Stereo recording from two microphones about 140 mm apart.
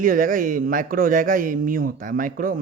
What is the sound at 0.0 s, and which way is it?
Speech, 80° right.